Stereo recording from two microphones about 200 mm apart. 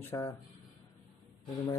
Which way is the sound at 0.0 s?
10° left (ahead or behind).